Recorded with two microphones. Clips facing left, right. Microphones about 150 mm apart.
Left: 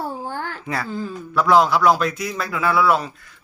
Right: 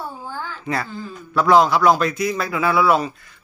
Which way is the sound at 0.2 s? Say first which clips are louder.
Left 3 dB; 65° left (ahead or behind).